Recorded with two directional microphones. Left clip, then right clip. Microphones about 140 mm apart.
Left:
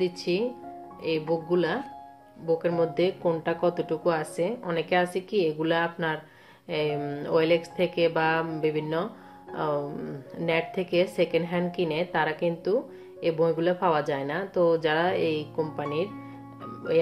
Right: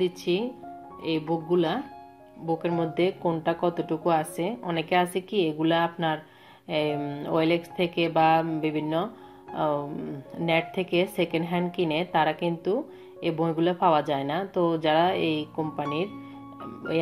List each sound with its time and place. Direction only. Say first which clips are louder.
0.0 s speech: even; 45° right (ahead or behind)